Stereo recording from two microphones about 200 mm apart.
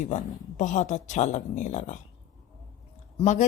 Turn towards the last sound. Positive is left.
turn(degrees=35)  # may be behind; listen again after turning